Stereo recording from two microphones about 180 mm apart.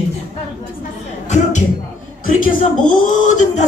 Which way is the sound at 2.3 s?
50° left (ahead or behind).